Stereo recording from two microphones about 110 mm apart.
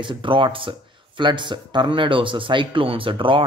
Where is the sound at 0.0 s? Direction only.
50° right (ahead or behind).